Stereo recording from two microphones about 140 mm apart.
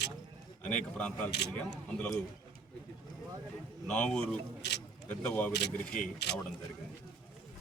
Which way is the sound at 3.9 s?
5° left (ahead or behind).